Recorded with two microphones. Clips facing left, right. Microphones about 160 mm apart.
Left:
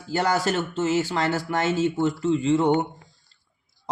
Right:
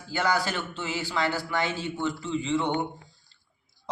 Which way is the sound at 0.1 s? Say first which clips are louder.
Left 4 dB; 40° left (ahead or behind).